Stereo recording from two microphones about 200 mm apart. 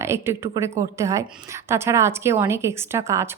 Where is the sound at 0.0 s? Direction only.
15° right (ahead or behind).